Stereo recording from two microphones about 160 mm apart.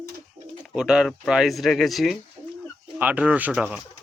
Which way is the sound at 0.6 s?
5° right (ahead or behind).